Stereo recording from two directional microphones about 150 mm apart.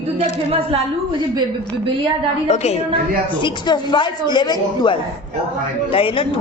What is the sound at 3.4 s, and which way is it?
A woman's voice, 30° left (ahead or behind).